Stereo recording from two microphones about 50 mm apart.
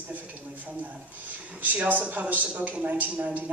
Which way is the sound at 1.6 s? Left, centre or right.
Right.